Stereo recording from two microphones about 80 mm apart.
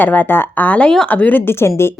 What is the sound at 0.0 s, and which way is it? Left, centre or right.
A woman's voice, left.